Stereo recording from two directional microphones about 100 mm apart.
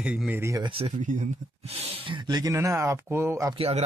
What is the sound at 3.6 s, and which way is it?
Speech, 90° right.